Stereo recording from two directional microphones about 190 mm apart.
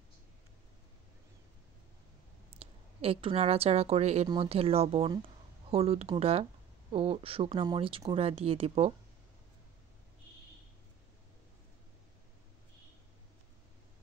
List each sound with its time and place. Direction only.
2.5 s a woman's voice: 30° right (ahead or behind)